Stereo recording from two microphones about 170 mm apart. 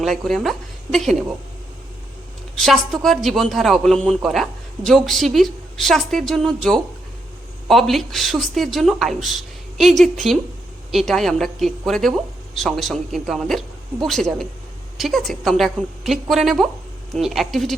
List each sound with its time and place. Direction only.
0.0 s a woman's voice: centre (ahead or behind)
2.6 s speech: centre (ahead or behind)